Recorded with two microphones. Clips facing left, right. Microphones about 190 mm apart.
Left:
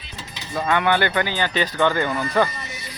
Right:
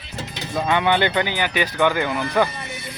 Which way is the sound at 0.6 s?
15° right (ahead or behind).